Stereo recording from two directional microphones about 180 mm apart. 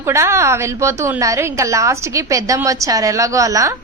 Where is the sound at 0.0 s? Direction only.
15° right (ahead or behind).